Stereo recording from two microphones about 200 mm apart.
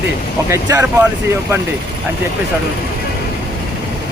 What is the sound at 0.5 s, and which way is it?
Speech, 15° right (ahead or behind).